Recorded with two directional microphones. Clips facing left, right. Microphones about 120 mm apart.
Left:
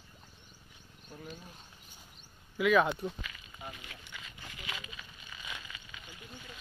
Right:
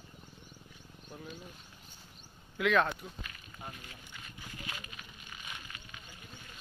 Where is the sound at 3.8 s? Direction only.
90° left.